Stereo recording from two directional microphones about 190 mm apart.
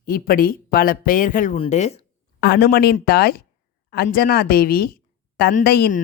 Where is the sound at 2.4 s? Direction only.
55° left (ahead or behind).